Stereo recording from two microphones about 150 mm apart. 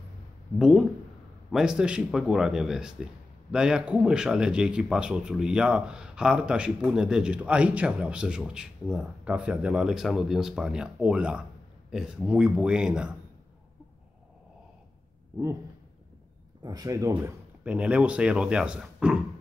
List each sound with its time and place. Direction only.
0.6 s speech: 5° right (ahead or behind)
16.6 s speech: 25° right (ahead or behind)
17.6 s speech: 10° right (ahead or behind)